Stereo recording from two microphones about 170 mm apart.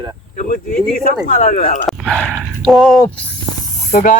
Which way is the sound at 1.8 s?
Centre (ahead or behind).